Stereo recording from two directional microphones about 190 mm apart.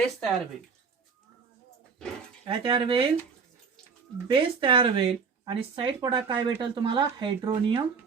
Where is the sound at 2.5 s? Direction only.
25° right (ahead or behind).